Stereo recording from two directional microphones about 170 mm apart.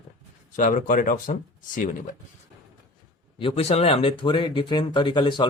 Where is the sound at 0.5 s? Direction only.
50° left (ahead or behind).